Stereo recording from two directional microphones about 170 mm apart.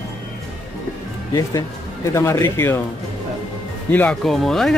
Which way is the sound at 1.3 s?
20° left (ahead or behind).